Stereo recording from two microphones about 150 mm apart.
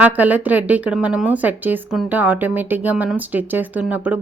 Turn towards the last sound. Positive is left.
turn(degrees=-10)  # may be behind; listen again after turning